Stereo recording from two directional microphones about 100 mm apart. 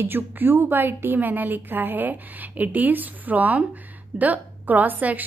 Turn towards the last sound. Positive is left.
turn(degrees=-15)  # may be behind; listen again after turning